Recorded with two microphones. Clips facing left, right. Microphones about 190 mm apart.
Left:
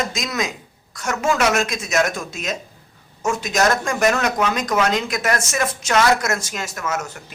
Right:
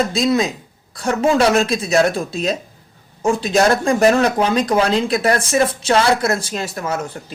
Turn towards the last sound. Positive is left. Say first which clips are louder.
# right 3 dB
turn(degrees=-30)  # may be behind; listen again after turning